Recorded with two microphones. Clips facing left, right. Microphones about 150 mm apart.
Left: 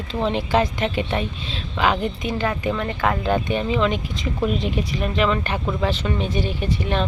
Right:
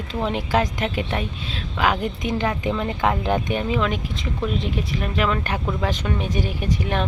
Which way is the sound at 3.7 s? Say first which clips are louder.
Left 3 dB; centre (ahead or behind).